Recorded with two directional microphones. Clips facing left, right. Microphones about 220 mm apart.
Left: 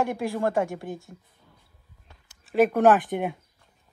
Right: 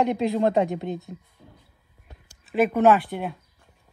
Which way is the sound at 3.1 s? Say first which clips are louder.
Left 3 dB; 10° left (ahead or behind).